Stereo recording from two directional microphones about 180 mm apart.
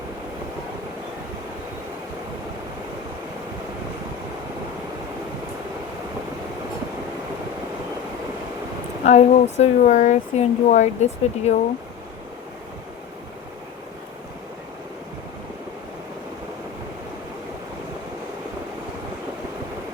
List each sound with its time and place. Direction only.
9.0 s speech: 40° left (ahead or behind)